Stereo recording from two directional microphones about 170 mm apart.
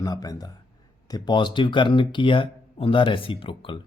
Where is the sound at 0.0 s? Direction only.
20° left (ahead or behind).